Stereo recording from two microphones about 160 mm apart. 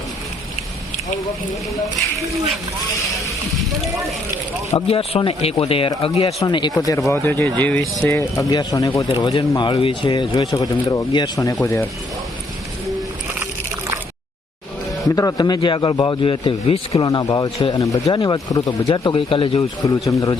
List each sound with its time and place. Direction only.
4.9 s speech: 35° left (ahead or behind); by 11.9 s 20° left (ahead or behind)
13.4 s a sound: 20° right (ahead or behind)
15.0 s speech: 20° left (ahead or behind); by 17.1 s 35° left (ahead or behind)
17.1 s speech: 25° left (ahead or behind)
19.8 s speech: 20° left (ahead or behind)